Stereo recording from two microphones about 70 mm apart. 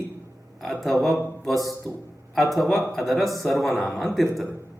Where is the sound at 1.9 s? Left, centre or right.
Left.